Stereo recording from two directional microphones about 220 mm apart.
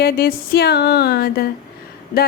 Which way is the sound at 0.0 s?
45° left (ahead or behind).